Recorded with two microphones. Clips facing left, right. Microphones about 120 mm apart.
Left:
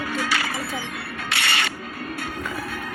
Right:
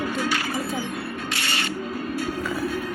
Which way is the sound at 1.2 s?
70° left (ahead or behind).